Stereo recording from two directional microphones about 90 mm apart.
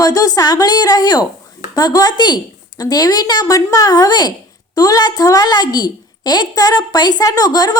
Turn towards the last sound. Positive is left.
turn(degrees=45)  # may be behind; listen again after turning